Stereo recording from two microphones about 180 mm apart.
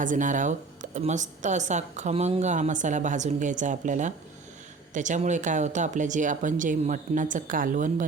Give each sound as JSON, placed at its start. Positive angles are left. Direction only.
{"t": 0.0, "sound": "a woman's voice", "side_deg": -45}